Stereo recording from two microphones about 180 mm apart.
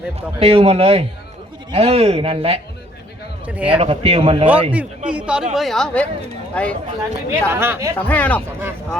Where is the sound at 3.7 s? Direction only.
35° right (ahead or behind).